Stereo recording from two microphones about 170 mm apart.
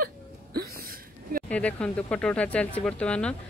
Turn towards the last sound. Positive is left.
turn(degrees=5)  # may be behind; listen again after turning